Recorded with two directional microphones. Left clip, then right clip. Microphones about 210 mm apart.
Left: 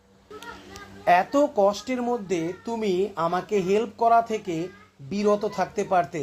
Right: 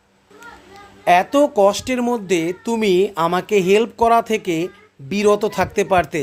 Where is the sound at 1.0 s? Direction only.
40° right (ahead or behind).